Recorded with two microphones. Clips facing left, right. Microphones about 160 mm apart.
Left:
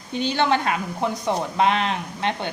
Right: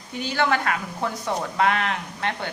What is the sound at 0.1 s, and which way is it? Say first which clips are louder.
A woman's voice: left 3 dB; 25° left (ahead or behind).